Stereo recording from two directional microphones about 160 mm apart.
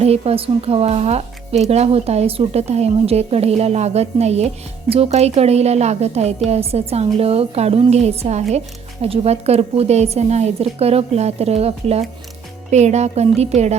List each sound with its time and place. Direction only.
0.0 s speech: 40° right (ahead or behind)